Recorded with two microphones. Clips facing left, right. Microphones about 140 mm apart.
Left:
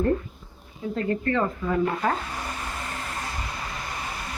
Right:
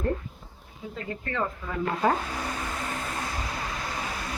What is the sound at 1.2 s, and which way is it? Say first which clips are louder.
Speech: left 3 dB; 5° right (ahead or behind).